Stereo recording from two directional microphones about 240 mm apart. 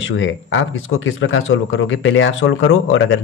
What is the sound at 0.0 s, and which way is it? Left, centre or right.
Speech, left.